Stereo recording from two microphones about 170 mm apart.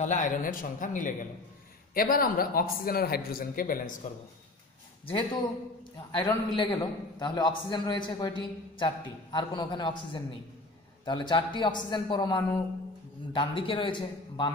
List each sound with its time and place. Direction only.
0.0 s a man's voice: 50° left (ahead or behind)
5.0 s a man's voice: 30° left (ahead or behind)